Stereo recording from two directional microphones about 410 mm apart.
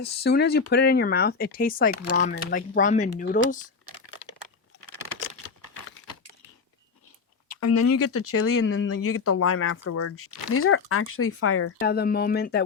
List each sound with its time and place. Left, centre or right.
0.0 s speech: left
7.5 s speech: left